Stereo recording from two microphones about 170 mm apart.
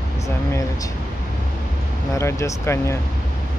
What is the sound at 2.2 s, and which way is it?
Speech, 15° left (ahead or behind).